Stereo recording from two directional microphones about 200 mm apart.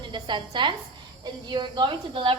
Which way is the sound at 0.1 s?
25° right (ahead or behind).